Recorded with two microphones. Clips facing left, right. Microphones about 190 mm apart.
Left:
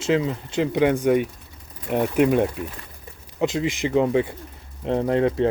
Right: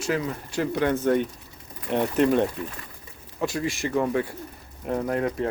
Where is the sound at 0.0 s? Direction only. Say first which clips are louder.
Left 5 dB; 20° left (ahead or behind).